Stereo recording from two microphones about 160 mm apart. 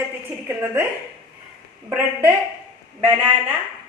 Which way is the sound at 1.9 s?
10° right (ahead or behind).